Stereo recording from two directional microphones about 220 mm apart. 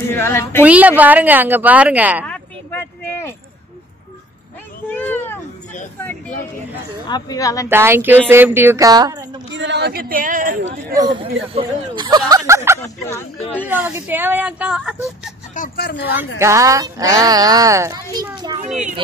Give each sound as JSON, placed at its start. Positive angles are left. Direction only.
{"t": 0.1, "sound": "speech", "side_deg": 10}
{"t": 0.7, "sound": "speech", "side_deg": -5}
{"t": 2.2, "sound": "a sound", "side_deg": 10}
{"t": 4.8, "sound": "a sound", "side_deg": 10}
{"t": 7.1, "sound": "speech", "side_deg": 20}
{"t": 7.6, "sound": "speech", "side_deg": -10}
{"t": 9.5, "sound": "speech", "side_deg": -55}
{"t": 11.0, "sound": "speech", "side_deg": -20}
{"t": 12.8, "sound": "speech", "side_deg": 10}
{"t": 13.7, "sound": "speech", "side_deg": -10}
{"t": 15.5, "sound": "speech", "side_deg": 40}
{"t": 16.3, "sound": "speech", "side_deg": -15}